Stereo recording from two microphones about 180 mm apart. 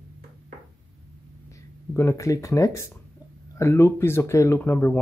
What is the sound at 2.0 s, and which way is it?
Speech, 15° left (ahead or behind).